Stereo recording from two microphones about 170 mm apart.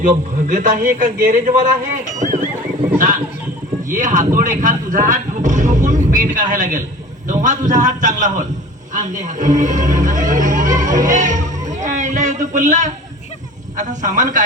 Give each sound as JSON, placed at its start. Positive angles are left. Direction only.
{"t": 0.4, "sound": "speech", "side_deg": -45}
{"t": 3.8, "sound": "speech", "side_deg": -50}
{"t": 11.7, "sound": "a sound", "side_deg": -45}
{"t": 13.7, "sound": "speech", "side_deg": -50}